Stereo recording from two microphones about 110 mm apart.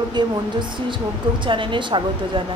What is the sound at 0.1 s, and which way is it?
Speech, 45° right (ahead or behind).